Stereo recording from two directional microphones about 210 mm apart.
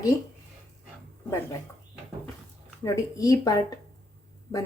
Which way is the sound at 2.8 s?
15° left (ahead or behind).